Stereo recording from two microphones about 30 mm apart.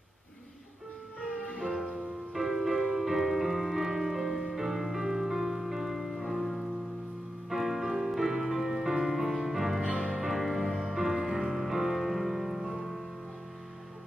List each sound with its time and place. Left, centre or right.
1.6 s music: centre
9.8 s music: right
10.1 s music: centre